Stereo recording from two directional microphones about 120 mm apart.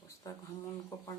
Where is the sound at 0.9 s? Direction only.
30° left (ahead or behind).